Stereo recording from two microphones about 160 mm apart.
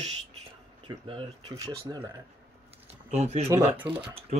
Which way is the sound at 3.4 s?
15° right (ahead or behind).